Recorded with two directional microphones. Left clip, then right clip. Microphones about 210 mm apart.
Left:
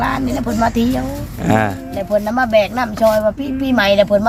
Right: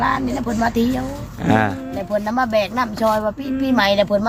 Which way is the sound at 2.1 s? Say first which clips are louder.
Left 5 dB; 20° right (ahead or behind).